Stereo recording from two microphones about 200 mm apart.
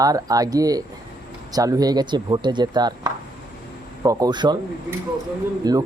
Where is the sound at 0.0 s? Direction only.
20° right (ahead or behind).